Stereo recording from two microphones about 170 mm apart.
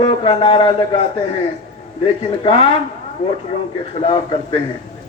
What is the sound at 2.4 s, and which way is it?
Speech, 30° left (ahead or behind).